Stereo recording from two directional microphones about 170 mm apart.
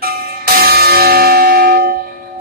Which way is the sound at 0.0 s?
60° right (ahead or behind).